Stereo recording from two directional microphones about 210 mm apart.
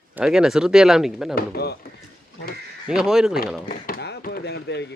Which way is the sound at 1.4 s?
50° left (ahead or behind).